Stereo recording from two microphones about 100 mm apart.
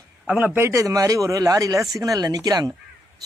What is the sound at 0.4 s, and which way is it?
Speech, 20° right (ahead or behind).